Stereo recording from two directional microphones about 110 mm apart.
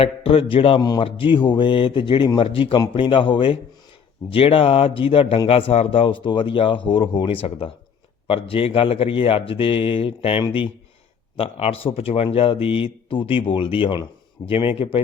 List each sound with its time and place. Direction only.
0.0 s speech: 60° left (ahead or behind)
2.5 s speech: 55° left (ahead or behind)